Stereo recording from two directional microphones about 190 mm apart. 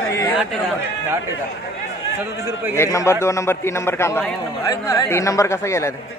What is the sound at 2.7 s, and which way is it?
A man's voice, 15° left (ahead or behind).